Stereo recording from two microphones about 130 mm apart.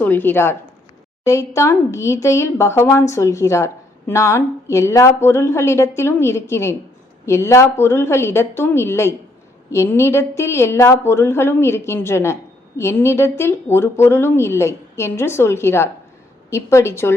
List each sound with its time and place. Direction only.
0.0 s a woman's voice: 15° left (ahead or behind)